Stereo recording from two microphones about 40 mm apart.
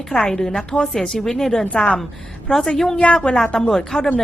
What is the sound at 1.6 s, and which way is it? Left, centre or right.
Speech, left.